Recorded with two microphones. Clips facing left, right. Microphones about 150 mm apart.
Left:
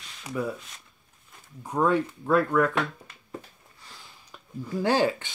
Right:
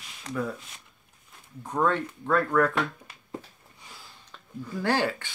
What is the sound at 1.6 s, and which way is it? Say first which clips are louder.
Speech: left 2 dB; 10° left (ahead or behind).